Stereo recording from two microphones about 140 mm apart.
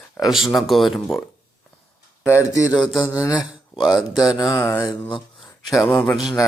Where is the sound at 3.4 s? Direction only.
Centre (ahead or behind).